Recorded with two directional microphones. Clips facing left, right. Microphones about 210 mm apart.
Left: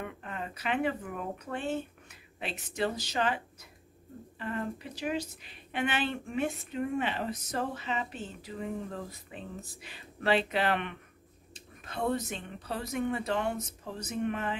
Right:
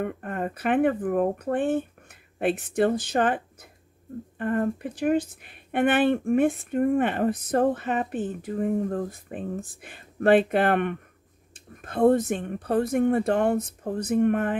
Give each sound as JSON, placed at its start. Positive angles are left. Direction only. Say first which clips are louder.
{"t": 0.0, "sound": "speech", "louder": "right 10 dB", "side_deg": -50}